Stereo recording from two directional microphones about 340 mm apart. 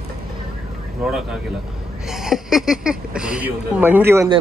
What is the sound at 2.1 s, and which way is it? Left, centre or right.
Speech, centre.